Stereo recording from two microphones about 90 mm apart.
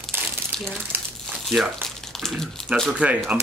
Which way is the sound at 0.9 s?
20° right (ahead or behind).